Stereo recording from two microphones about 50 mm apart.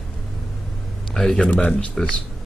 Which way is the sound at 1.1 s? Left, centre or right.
Centre.